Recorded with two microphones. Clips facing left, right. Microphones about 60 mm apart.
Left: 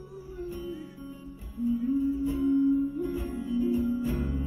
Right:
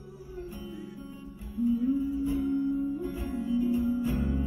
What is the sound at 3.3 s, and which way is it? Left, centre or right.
Music, right.